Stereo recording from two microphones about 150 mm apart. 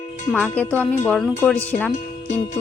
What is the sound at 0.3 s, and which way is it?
Speech, 10° left (ahead or behind).